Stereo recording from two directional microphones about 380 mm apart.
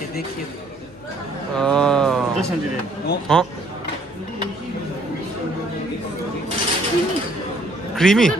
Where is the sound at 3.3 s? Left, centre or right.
Centre.